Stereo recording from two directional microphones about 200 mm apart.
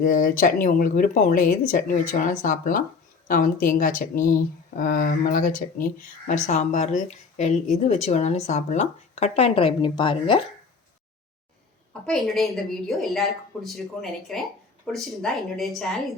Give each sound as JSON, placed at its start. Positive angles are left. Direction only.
{"t": 0.0, "sound": "speech", "side_deg": 45}
{"t": 12.0, "sound": "speech", "side_deg": 0}